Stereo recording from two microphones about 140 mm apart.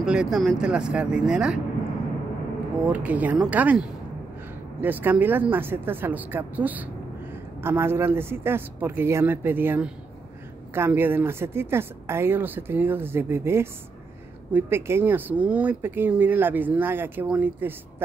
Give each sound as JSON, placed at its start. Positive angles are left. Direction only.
{"t": 0.0, "sound": "speech", "side_deg": -5}
{"t": 2.9, "sound": "speech", "side_deg": -10}